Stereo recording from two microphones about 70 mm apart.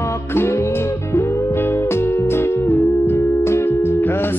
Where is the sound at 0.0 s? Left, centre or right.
Left.